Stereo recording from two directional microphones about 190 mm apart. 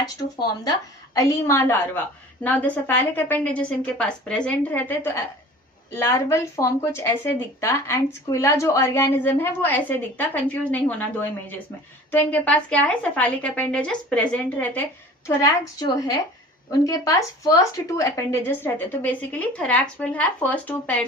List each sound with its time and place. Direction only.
0.0 s a woman's voice: 20° left (ahead or behind)